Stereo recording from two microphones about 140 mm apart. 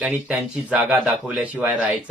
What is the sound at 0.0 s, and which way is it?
Speech, 5° right (ahead or behind).